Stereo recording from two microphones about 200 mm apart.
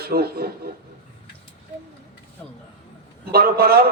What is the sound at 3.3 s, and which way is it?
Speech, 50° right (ahead or behind).